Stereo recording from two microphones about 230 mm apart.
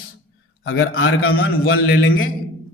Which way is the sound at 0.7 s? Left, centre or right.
Left.